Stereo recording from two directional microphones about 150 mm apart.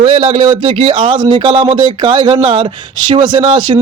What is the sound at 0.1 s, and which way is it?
Speech, 40° right (ahead or behind).